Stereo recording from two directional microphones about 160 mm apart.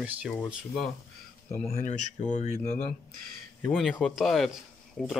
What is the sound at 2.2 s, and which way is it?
Speech, 45° left (ahead or behind).